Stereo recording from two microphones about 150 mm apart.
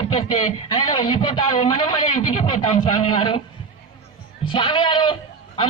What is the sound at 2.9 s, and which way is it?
Speech, 35° left (ahead or behind).